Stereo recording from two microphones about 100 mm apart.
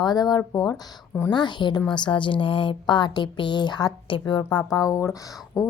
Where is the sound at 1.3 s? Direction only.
50° left (ahead or behind).